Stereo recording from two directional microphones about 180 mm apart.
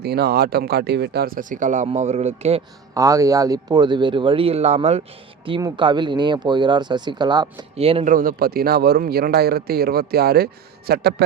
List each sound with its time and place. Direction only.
0.0 s a man's voice: 60° right (ahead or behind); by 2.6 s 35° right (ahead or behind)
2.9 s a man's voice: 20° right (ahead or behind); by 5.0 s 35° right (ahead or behind)
5.5 s a man's voice: 25° right (ahead or behind)
8.0 s a man's voice: 50° right (ahead or behind)